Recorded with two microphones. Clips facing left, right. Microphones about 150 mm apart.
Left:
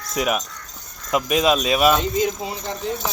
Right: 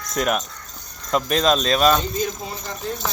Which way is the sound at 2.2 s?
20° left (ahead or behind).